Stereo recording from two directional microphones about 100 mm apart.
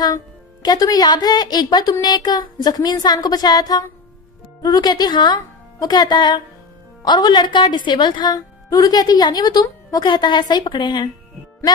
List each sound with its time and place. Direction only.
0.0 s speech: 40° left (ahead or behind)
8.4 s speech: 35° left (ahead or behind)